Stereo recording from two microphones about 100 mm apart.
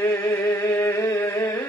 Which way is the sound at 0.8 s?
30° left (ahead or behind).